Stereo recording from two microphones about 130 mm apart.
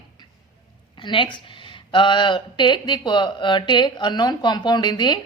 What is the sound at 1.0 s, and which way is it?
A woman's voice, 40° left (ahead or behind).